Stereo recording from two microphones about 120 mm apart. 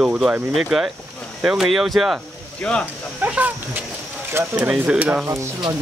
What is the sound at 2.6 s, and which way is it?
Speech, 10° left (ahead or behind).